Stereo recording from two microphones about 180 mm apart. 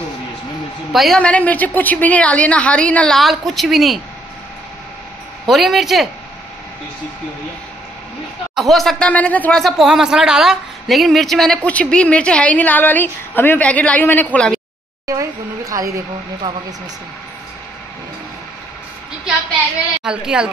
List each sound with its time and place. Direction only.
0.9 s a woman's voice: centre (ahead or behind)
5.5 s speech: centre (ahead or behind)
8.5 s speech: centre (ahead or behind)
15.0 s a woman's voice: 20° right (ahead or behind)
20.0 s a woman's voice: 5° right (ahead or behind)